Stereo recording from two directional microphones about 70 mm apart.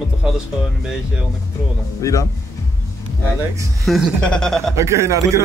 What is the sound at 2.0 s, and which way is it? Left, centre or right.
Speech, left.